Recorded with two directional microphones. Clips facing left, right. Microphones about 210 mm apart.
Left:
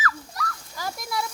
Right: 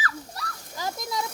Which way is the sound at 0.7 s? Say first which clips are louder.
Right 1 dB; 20° right (ahead or behind).